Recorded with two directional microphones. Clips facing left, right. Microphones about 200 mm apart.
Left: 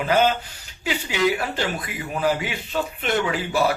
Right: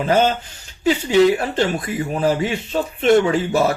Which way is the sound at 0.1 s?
40° right (ahead or behind).